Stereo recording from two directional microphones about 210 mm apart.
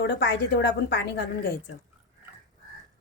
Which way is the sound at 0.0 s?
55° left (ahead or behind).